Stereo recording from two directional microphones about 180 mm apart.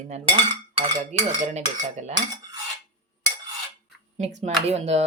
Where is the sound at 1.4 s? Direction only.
40° right (ahead or behind).